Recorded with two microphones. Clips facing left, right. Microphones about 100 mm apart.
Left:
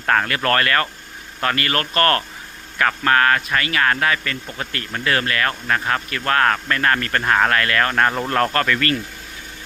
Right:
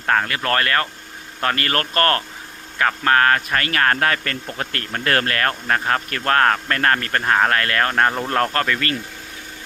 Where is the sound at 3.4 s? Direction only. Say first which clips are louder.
Even; 45° right (ahead or behind).